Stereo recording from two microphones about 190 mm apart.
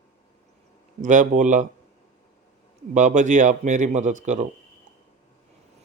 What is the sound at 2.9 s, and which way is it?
Speech, 40° right (ahead or behind).